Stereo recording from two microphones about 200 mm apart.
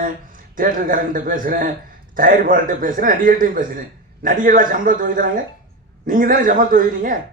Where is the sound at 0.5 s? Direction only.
45° right (ahead or behind).